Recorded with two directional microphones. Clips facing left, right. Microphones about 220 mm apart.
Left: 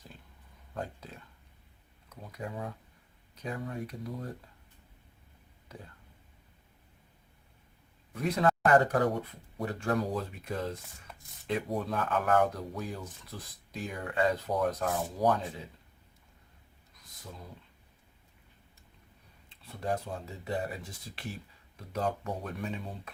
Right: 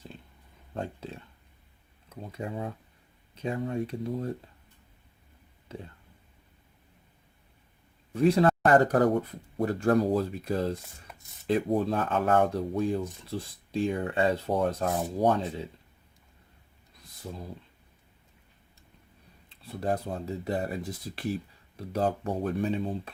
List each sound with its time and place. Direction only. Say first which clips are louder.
0.7 s a sound: right 4 dB; 25° right (ahead or behind)
3.3 s speech: right 7 dB; 25° right (ahead or behind)
5.7 s speech: right 7 dB; 25° right (ahead or behind)
8.1 s speech: right 6 dB; 30° right (ahead or behind)
17.2 s speech: right 8 dB; 30° right (ahead or behind)
19.8 s speech: right 4 dB; 35° right (ahead or behind)
21.8 s speech: right 5 dB; 35° right (ahead or behind)